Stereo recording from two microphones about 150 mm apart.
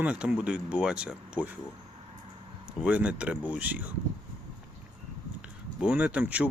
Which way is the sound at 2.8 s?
10° right (ahead or behind).